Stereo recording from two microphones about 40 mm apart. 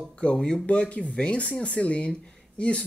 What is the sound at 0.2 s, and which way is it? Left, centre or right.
Speech, left.